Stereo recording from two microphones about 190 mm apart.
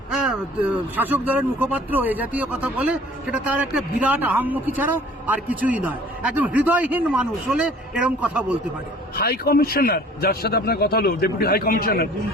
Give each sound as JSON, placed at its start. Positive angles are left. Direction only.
{"t": 0.1, "sound": "speech", "side_deg": -5}
{"t": 9.1, "sound": "a man's voice", "side_deg": 55}